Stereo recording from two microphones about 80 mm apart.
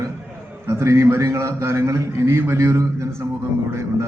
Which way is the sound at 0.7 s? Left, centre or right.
Right.